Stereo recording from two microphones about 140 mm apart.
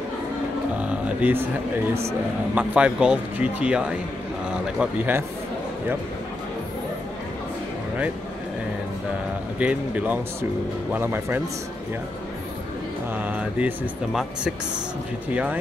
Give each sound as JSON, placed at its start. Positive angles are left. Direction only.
{"t": 0.7, "sound": "cattle", "side_deg": -10}
{"t": 2.0, "sound": "speech", "side_deg": -10}
{"t": 9.6, "sound": "speech", "side_deg": -10}
{"t": 13.2, "sound": "speech", "side_deg": -10}